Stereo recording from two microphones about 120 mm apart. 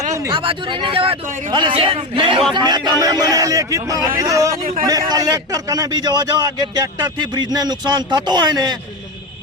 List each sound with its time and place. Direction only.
0.1 s a sound: 25° right (ahead or behind)
0.3 s a man's voice: 45° right (ahead or behind); by 4.5 s 25° right (ahead or behind)
4.6 s speech: 60° right (ahead or behind)
4.9 s a man's voice: 30° right (ahead or behind)